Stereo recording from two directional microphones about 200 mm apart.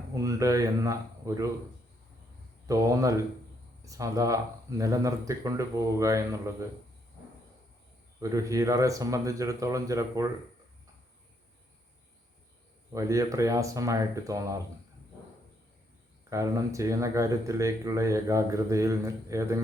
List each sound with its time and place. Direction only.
0.1 s speech: 15° right (ahead or behind)
2.6 s speech: 15° right (ahead or behind)
8.2 s speech: 15° right (ahead or behind)
12.9 s speech: 15° right (ahead or behind)
16.3 s speech: 15° right (ahead or behind)